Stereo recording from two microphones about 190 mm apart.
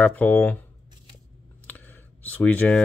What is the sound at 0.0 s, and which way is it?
Speech, 10° left (ahead or behind).